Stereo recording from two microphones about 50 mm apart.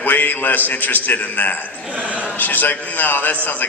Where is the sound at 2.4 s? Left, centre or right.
Left.